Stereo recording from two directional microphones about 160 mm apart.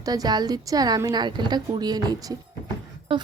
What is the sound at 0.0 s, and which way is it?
A woman's voice, 25° right (ahead or behind).